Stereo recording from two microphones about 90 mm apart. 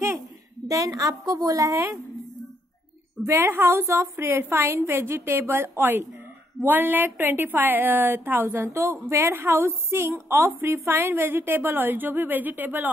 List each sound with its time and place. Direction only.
0.7 s a woman's voice: 40° right (ahead or behind)
3.3 s a woman's voice: 30° right (ahead or behind)